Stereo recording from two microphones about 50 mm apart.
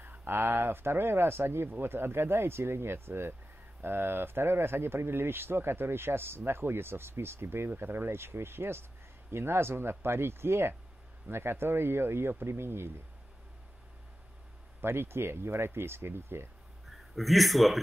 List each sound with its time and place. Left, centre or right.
0.0 s speech: right
14.8 s speech: right
16.8 s a man's voice: centre